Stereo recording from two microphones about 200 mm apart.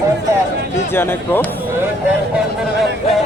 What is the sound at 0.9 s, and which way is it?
Speech, 10° left (ahead or behind).